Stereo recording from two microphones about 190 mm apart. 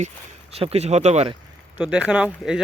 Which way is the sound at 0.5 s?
35° right (ahead or behind).